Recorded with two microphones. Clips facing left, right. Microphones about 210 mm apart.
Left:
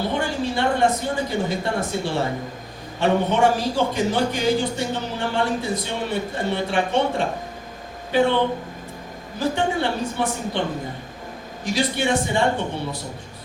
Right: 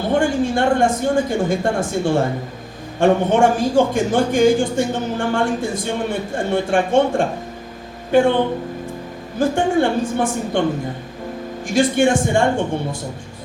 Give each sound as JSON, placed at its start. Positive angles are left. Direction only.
{"t": 0.1, "sound": "a man's voice", "side_deg": -50}
{"t": 9.4, "sound": "a man's voice", "side_deg": -50}
{"t": 11.6, "sound": "a man's voice", "side_deg": -50}